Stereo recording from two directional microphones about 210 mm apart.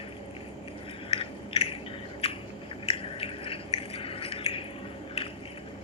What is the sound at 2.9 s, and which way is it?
Squish, 25° left (ahead or behind).